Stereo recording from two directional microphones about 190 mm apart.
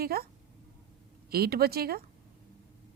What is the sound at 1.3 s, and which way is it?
Speech, 55° right (ahead or behind).